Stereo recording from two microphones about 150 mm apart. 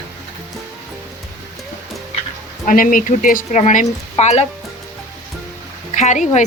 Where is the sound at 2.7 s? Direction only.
65° left (ahead or behind); by 4.5 s 45° left (ahead or behind).